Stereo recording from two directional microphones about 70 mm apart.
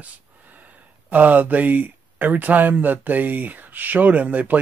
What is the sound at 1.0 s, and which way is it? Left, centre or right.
Speech, right.